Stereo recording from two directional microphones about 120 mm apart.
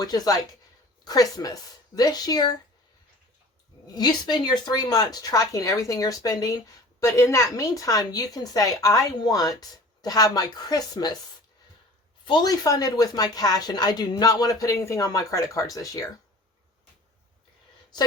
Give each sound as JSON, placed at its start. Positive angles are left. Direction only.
{"t": 0.0, "sound": "speech", "side_deg": 30}
{"t": 3.9, "sound": "speech", "side_deg": 35}
{"t": 12.2, "sound": "speech", "side_deg": 40}